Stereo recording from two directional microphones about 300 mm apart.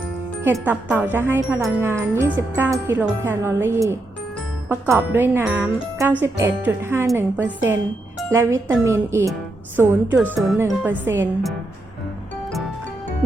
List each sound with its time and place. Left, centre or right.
0.4 s speech: centre